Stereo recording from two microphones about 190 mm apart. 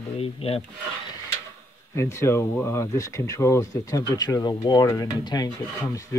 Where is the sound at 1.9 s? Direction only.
15° left (ahead or behind).